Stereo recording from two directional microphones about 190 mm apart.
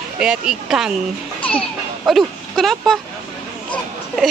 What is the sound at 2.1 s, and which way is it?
Speech, centre (ahead or behind).